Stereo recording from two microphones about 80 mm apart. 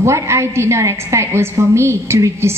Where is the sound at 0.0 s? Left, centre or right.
Right.